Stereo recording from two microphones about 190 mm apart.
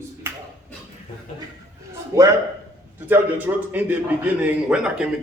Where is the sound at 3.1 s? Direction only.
10° right (ahead or behind).